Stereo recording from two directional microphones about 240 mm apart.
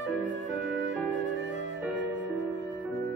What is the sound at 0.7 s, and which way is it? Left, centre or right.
Music, right.